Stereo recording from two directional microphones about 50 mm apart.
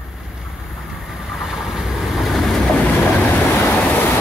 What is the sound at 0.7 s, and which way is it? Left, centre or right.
Vehicle, centre.